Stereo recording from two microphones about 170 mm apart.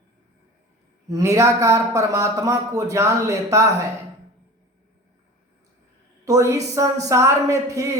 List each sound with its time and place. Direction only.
1.1 s speech: 15° right (ahead or behind)
6.2 s speech: 20° right (ahead or behind)